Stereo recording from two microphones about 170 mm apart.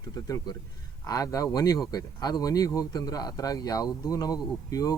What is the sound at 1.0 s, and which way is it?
Speech, 20° left (ahead or behind).